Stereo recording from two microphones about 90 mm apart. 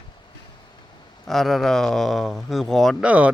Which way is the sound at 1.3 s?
Centre (ahead or behind).